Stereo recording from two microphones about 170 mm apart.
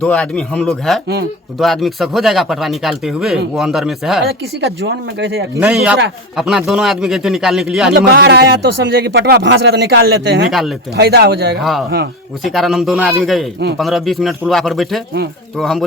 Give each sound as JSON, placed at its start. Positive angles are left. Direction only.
{"t": 0.0, "sound": "speech", "side_deg": 5}
{"t": 4.2, "sound": "speech", "side_deg": -75}
{"t": 5.5, "sound": "speech", "side_deg": -5}
{"t": 7.9, "sound": "speech", "side_deg": -65}
{"t": 10.5, "sound": "speech", "side_deg": 0}
{"t": 10.9, "sound": "speech", "side_deg": -70}
{"t": 11.6, "sound": "speech", "side_deg": 0}